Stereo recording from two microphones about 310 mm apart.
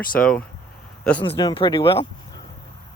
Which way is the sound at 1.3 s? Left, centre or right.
Centre.